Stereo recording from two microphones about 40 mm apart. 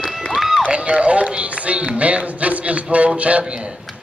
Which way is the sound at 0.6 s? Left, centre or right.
Right.